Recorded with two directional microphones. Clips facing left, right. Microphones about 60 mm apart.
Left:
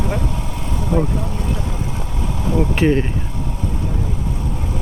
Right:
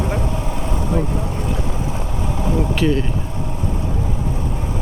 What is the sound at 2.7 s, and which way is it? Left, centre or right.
Speech, left.